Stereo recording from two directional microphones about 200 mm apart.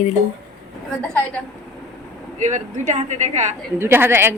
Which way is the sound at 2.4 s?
35° right (ahead or behind).